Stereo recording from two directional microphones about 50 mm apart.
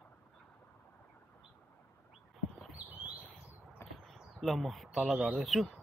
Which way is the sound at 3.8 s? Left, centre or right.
Left.